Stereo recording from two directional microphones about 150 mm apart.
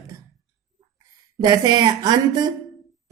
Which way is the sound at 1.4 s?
25° right (ahead or behind).